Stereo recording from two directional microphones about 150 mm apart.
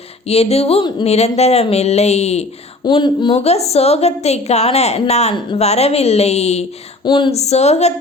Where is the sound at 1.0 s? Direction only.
45° left (ahead or behind).